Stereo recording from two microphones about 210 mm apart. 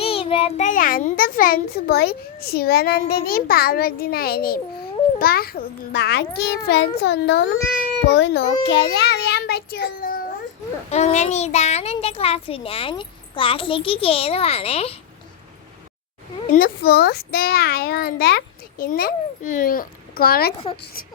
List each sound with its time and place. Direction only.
0.0 s a child's voice: 25° left (ahead or behind); by 10.2 s 45° left (ahead or behind)
10.9 s a child's voice: 35° left (ahead or behind)
16.5 s a child's voice: 45° left (ahead or behind)